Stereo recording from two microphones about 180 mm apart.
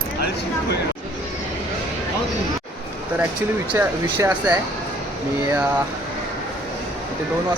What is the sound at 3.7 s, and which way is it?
Speech, 15° right (ahead or behind).